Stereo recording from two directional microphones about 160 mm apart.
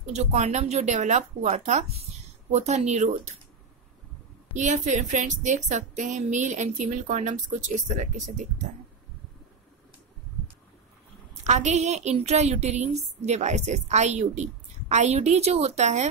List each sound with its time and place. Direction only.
0.0 s a woman's voice: 45° right (ahead or behind)
4.6 s a woman's voice: 50° right (ahead or behind)
11.4 s a woman's voice: 45° right (ahead or behind)